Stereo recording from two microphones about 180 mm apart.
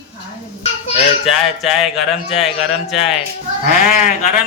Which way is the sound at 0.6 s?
35° left (ahead or behind).